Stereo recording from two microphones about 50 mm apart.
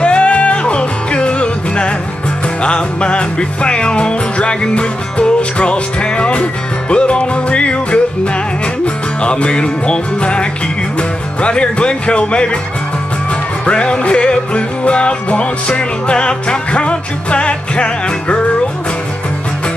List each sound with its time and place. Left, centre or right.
0.0 s music: left
11.0 s speech: left
13.7 s music: left